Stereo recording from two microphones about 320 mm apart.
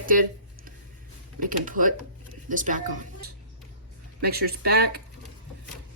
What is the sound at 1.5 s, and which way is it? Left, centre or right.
Speech, right.